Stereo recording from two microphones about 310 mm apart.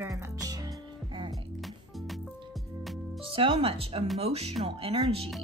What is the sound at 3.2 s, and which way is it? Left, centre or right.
Speech, centre.